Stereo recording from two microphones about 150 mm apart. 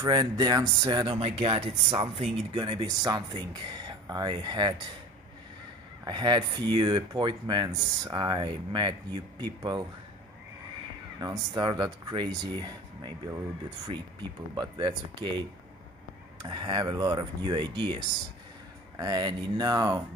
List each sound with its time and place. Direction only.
0.0 s speech: 30° right (ahead or behind)
6.0 s speech: 30° right (ahead or behind)
11.1 s speech: 30° right (ahead or behind)
14.5 s speech: 30° right (ahead or behind)